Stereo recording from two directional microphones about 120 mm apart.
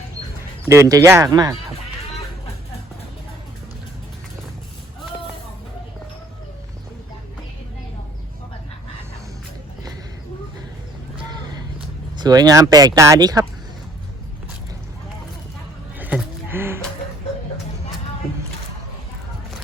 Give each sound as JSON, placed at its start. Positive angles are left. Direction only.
{"t": 0.7, "sound": "speech", "side_deg": -25}
{"t": 12.1, "sound": "speech", "side_deg": -35}
{"t": 16.0, "sound": "a sound", "side_deg": -15}